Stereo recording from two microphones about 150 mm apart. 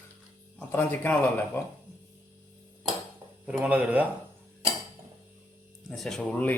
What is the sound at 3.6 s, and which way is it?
Speech, 10° right (ahead or behind).